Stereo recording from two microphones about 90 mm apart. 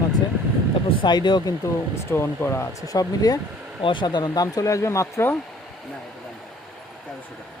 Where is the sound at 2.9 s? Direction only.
40° left (ahead or behind).